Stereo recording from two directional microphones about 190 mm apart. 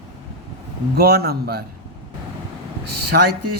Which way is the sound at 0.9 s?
55° right (ahead or behind).